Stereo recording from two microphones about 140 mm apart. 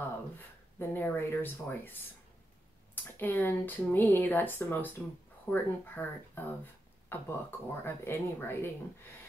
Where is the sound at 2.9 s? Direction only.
15° left (ahead or behind).